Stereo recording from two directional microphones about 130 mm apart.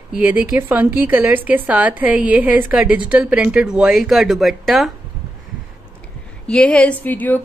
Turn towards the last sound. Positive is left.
turn(degrees=15)  # may be behind; listen again after turning